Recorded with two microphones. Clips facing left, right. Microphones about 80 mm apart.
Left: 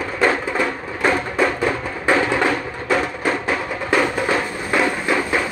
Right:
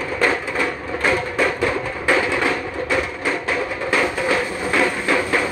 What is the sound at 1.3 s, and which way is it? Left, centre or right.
Music, left.